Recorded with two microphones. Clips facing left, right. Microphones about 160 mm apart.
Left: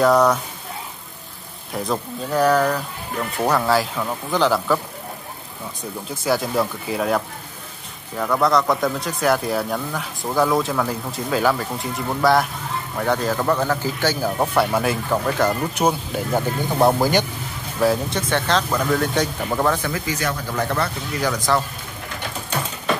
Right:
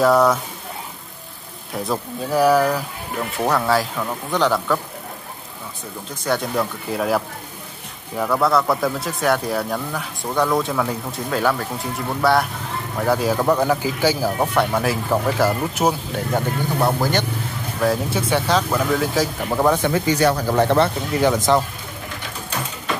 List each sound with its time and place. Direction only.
0.0 s a man's voice: centre (ahead or behind)
1.7 s a man's voice: centre (ahead or behind)
6.2 s a man's voice: 5° left (ahead or behind)
14.4 s a man's voice: centre (ahead or behind)
17.7 s a man's voice: centre (ahead or behind)
19.6 s speech: 20° right (ahead or behind)